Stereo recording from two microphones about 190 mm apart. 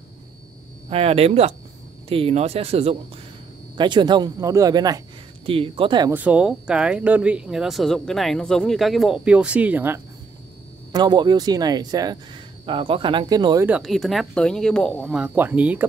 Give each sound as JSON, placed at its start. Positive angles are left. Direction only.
{"t": 0.8, "sound": "speech", "side_deg": -30}
{"t": 6.1, "sound": "speech", "side_deg": -5}
{"t": 10.9, "sound": "speech", "side_deg": -20}
{"t": 13.7, "sound": "speech", "side_deg": -5}